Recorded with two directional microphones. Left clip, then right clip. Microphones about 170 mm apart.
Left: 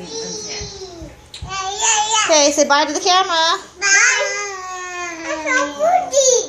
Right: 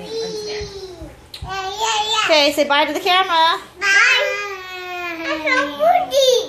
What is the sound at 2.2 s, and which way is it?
A woman's voice, 5° left (ahead or behind).